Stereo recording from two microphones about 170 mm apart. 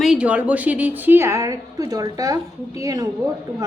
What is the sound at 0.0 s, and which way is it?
A woman's voice, 5° right (ahead or behind).